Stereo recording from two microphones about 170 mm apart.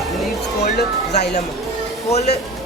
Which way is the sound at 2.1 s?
40° left (ahead or behind).